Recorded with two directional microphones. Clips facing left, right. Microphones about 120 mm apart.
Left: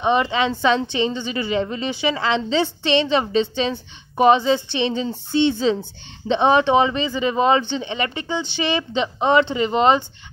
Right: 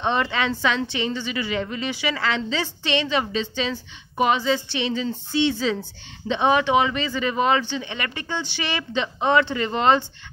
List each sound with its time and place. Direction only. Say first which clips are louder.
0.0 s a woman's voice: left 4 dB; 15° left (ahead or behind)